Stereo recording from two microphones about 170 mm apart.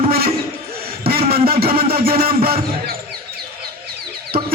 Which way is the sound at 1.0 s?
65° right (ahead or behind).